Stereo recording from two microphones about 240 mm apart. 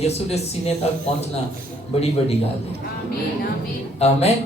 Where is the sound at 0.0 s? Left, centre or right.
Left.